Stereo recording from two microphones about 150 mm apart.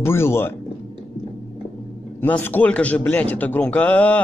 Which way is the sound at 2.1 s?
10° left (ahead or behind).